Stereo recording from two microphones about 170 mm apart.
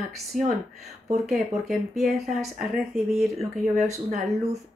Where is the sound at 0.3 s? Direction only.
Centre (ahead or behind).